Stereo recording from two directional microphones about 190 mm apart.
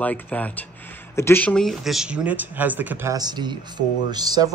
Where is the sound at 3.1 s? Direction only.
20° right (ahead or behind).